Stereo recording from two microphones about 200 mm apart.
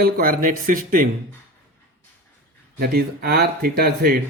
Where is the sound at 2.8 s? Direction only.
50° right (ahead or behind).